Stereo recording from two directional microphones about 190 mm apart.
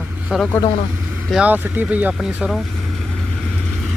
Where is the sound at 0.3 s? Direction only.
5° right (ahead or behind).